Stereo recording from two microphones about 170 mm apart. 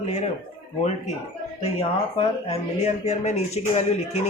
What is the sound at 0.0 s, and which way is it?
Speech, 40° left (ahead or behind).